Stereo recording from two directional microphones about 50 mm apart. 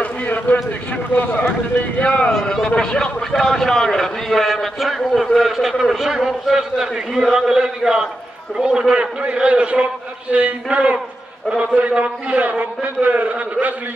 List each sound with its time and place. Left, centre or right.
0.0 s a sound: left
2.0 s speech: left
2.4 s a man's voice: centre; by 13.7 s right